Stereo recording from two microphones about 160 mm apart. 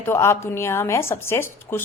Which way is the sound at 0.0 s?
15° left (ahead or behind).